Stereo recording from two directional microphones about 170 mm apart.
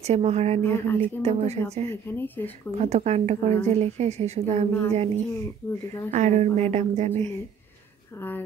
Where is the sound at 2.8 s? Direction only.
40° right (ahead or behind).